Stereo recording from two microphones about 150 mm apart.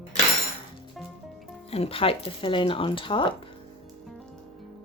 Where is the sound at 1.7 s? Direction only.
40° left (ahead or behind).